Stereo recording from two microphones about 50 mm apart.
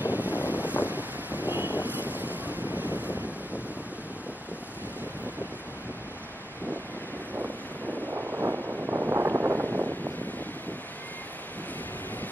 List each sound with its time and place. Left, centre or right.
0.0 s wind noise: right
8.1 s wind noise: right
9.1 s a sound: right